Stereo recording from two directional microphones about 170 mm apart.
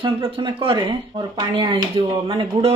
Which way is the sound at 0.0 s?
30° right (ahead or behind).